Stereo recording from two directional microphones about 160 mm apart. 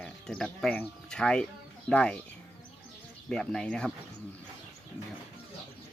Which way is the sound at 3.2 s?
5° left (ahead or behind).